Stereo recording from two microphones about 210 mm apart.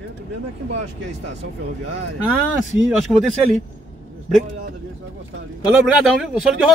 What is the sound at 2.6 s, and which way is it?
Speech, centre (ahead or behind).